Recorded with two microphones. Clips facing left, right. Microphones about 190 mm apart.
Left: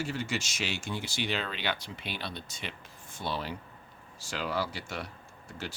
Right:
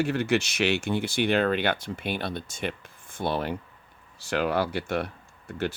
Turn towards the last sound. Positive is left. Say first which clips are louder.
# right 10 dB
turn(degrees=-55)  # may be behind; listen again after turning